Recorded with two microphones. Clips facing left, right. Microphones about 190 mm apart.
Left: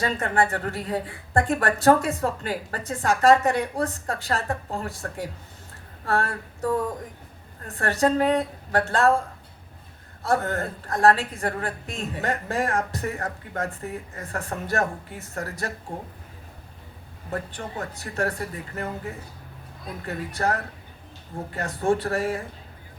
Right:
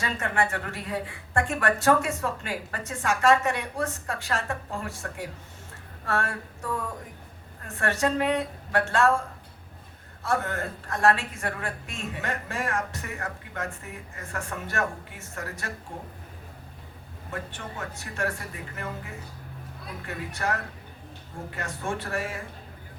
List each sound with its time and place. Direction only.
0.0 s a woman's voice: 35° left (ahead or behind)
10.2 s a woman's voice: 35° left (ahead or behind)
17.3 s a woman's voice: 35° left (ahead or behind)
20.1 s a woman's voice: 35° left (ahead or behind)